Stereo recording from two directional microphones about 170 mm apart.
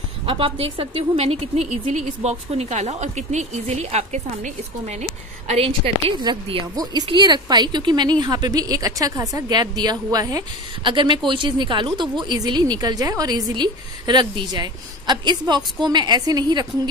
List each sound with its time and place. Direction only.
0.7 s a woman's voice: 35° right (ahead or behind)